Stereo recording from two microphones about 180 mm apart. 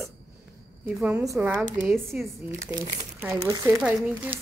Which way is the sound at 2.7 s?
15° right (ahead or behind).